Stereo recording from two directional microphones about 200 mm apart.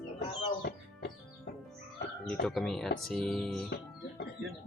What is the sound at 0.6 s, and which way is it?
Music, 50° left (ahead or behind).